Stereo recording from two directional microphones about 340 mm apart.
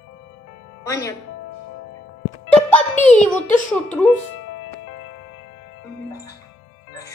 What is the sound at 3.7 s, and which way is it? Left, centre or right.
Speech, centre.